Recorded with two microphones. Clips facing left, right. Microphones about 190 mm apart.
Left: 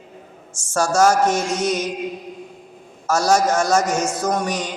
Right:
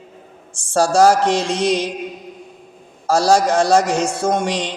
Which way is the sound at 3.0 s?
30° right (ahead or behind).